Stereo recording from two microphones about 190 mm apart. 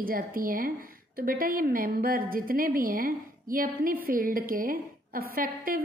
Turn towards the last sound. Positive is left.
turn(degrees=-50)  # may be behind; listen again after turning